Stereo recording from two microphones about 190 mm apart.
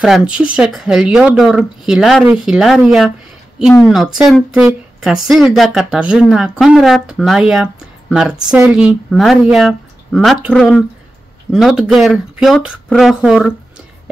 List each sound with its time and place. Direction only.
0.0 s speech: 5° right (ahead or behind)